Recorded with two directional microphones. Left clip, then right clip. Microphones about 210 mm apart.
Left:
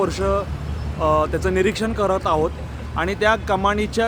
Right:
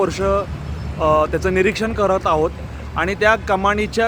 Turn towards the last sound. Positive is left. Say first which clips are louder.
# right 2 dB
turn(degrees=-5)  # may be behind; listen again after turning